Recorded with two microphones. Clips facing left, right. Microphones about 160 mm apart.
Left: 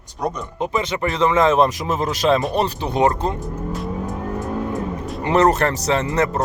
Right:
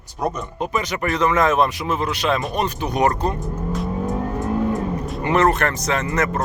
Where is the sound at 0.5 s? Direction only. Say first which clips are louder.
Left 2 dB; 20° left (ahead or behind).